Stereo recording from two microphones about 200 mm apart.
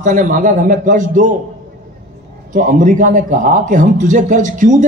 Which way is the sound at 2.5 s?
40° right (ahead or behind).